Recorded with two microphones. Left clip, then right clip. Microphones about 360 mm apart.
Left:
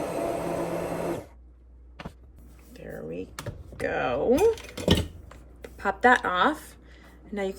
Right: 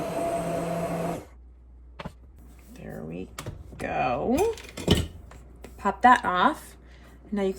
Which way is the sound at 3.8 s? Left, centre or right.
Centre.